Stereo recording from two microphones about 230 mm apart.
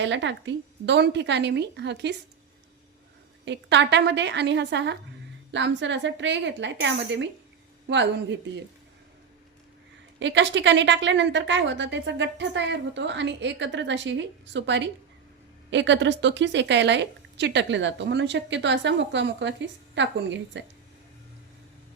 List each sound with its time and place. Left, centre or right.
0.0 s a woman's voice: right
3.4 s a woman's voice: right
10.2 s a woman's voice: right